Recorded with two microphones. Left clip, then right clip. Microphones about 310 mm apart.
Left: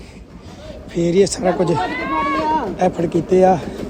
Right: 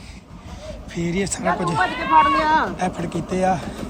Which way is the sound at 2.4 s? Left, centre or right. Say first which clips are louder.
Right 1 dB; right.